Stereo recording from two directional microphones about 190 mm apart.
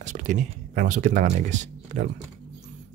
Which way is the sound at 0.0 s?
40° right (ahead or behind).